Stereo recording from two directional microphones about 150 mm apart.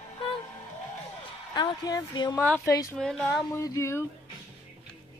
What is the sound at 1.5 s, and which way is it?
Speech, 25° left (ahead or behind).